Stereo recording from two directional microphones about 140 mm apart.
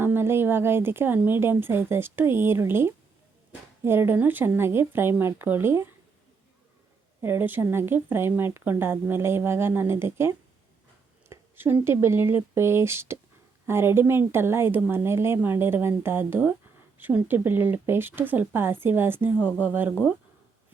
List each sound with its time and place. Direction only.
0.0 s speech: 15° right (ahead or behind)
7.2 s speech: 15° right (ahead or behind)